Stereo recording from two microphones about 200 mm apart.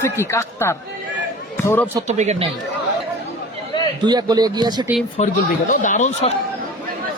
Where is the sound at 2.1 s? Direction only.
35° right (ahead or behind).